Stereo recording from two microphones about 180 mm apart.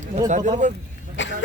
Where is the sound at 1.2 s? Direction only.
90° left.